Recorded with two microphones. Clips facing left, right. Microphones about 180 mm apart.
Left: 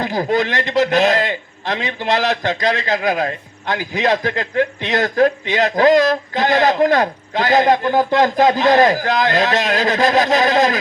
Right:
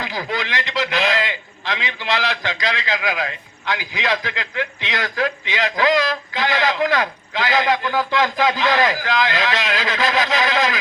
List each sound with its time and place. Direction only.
0.0 s a man's voice: 50° left (ahead or behind)